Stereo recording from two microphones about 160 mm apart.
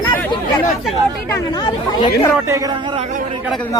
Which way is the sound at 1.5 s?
30° left (ahead or behind).